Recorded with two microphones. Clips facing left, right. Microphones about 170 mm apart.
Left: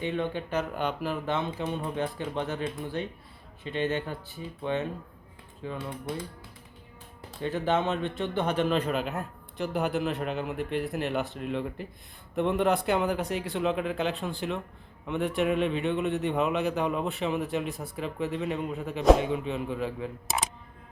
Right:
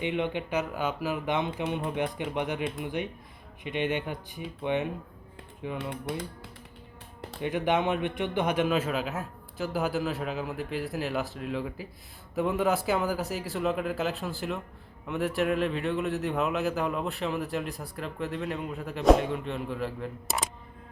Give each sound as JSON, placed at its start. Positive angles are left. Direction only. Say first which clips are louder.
{"t": 0.0, "sound": "speech", "louder": "right 1 dB", "side_deg": -15}
{"t": 0.7, "sound": "speech", "louder": "even", "side_deg": -5}
{"t": 7.4, "sound": "speech", "louder": "even", "side_deg": -15}